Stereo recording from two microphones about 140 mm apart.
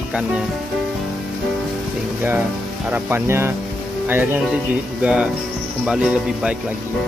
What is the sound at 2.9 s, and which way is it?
Speech, 15° right (ahead or behind).